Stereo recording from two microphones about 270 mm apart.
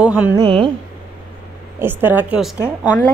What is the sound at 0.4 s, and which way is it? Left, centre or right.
Speech, centre.